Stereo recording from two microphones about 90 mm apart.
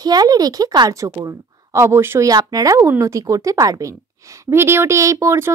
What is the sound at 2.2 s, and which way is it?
A woman's voice, 40° right (ahead or behind).